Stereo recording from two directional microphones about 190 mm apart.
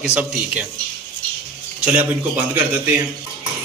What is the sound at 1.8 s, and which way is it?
Speech, 10° right (ahead or behind).